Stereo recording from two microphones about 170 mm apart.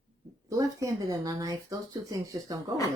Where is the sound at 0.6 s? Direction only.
20° right (ahead or behind).